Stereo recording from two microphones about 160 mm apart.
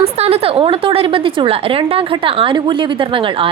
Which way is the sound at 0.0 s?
40° right (ahead or behind).